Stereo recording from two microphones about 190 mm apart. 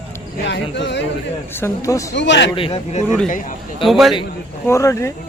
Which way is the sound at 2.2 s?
70° left (ahead or behind).